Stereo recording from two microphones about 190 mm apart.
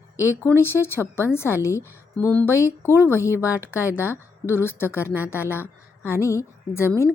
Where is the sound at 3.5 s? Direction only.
10° right (ahead or behind).